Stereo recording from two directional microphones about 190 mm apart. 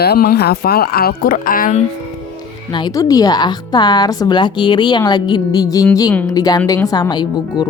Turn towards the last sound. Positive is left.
turn(degrees=20)  # may be behind; listen again after turning